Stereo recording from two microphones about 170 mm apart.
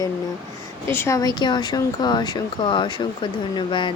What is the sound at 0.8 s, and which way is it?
A woman's voice, 15° left (ahead or behind).